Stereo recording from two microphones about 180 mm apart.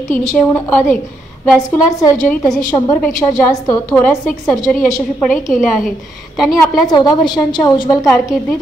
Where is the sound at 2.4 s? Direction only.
15° left (ahead or behind).